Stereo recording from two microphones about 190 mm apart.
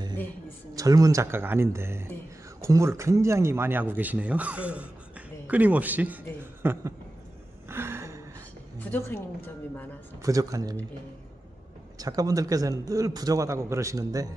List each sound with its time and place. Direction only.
0.7 s a man's voice: 20° right (ahead or behind)
6.4 s a sound: 10° right (ahead or behind)
8.7 s a woman's voice: 10° left (ahead or behind)
10.2 s a man's voice: 15° right (ahead or behind)
12.0 s a man's voice: 20° right (ahead or behind)